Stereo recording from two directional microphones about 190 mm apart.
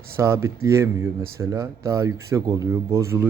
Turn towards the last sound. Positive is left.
turn(degrees=-15)  # may be behind; listen again after turning